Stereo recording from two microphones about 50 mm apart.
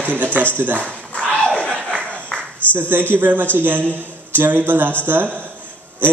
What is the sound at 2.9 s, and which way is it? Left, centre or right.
A man's voice, right.